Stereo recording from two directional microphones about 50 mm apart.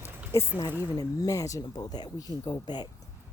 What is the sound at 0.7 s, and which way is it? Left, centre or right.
Speech, right.